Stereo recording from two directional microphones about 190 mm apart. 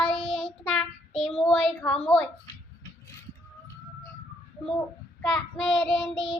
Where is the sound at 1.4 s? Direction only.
5° left (ahead or behind).